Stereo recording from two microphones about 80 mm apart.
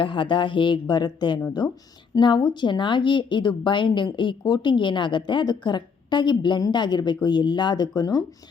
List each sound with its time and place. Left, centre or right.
0.0 s a woman's voice: left